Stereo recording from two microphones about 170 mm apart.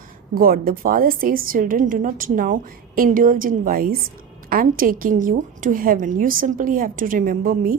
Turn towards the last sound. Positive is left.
turn(degrees=-60)  # may be behind; listen again after turning